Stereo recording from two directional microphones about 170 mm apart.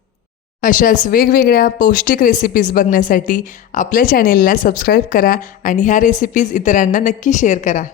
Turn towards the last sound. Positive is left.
turn(degrees=50)  # may be behind; listen again after turning